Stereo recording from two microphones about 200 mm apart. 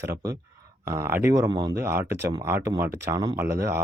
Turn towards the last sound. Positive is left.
turn(degrees=-15)  # may be behind; listen again after turning